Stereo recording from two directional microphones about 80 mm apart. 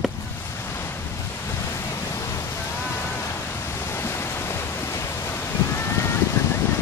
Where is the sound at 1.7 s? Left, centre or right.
Left.